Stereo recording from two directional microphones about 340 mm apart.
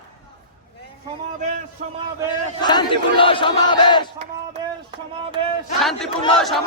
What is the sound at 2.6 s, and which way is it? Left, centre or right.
Battle cry, centre.